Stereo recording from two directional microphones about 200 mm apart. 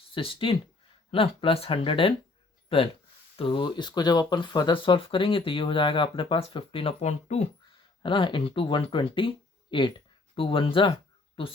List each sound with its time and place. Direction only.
0.1 s speech: 25° left (ahead or behind)